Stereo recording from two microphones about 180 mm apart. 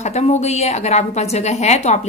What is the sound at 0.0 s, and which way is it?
A woman's voice, 40° left (ahead or behind).